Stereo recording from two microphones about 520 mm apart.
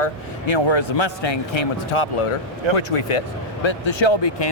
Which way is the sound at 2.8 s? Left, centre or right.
Left.